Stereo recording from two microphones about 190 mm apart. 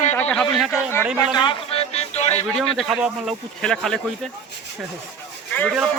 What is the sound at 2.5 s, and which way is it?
Speech, centre (ahead or behind).